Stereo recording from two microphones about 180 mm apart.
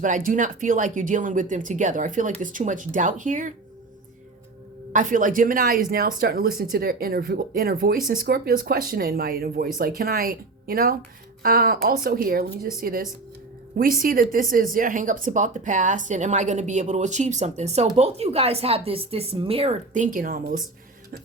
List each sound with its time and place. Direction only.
0.0 s speech: 45° right (ahead or behind)
4.9 s speech: 45° right (ahead or behind)
20.1 s speech: 50° right (ahead or behind)